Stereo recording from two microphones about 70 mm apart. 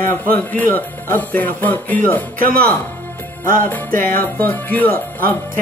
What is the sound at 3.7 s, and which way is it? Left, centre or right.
Music, left.